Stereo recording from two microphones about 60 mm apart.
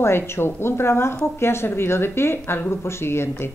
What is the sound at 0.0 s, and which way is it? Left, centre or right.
Speech, left.